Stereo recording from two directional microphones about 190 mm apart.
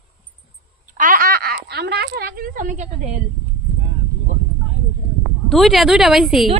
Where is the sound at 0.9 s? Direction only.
45° right (ahead or behind).